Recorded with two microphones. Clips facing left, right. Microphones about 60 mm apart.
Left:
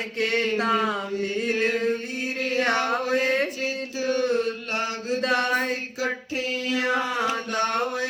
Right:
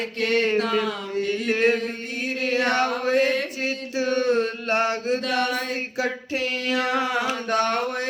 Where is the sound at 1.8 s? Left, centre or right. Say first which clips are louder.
Left 4 dB; left.